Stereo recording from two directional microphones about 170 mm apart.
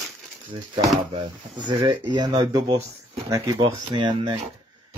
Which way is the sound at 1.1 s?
30° right (ahead or behind).